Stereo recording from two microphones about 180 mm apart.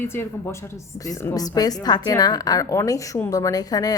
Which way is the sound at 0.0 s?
10° left (ahead or behind).